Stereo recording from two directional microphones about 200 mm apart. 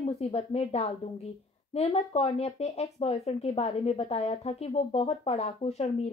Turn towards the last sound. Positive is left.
turn(degrees=30)  # may be behind; listen again after turning